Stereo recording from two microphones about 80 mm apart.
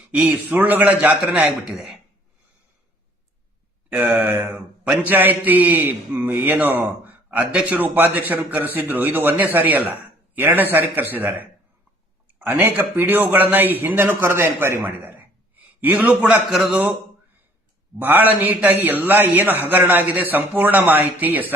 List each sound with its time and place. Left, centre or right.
0.1 s speech: centre
1.3 s a man's voice: centre
3.8 s speech: centre
4.5 s a man's voice: centre
5.0 s a man's voice: right
7.8 s speech: right
16.5 s a man's voice: centre
18.0 s speech: right